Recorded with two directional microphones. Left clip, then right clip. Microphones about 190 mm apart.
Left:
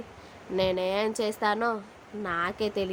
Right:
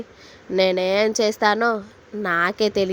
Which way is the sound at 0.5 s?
40° right (ahead or behind).